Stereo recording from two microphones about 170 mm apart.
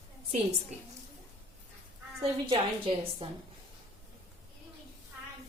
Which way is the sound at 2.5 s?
30° right (ahead or behind).